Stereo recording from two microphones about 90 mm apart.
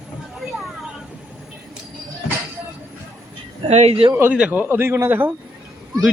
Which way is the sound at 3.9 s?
90° right.